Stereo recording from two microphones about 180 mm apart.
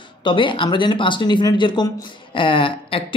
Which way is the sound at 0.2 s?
25° left (ahead or behind).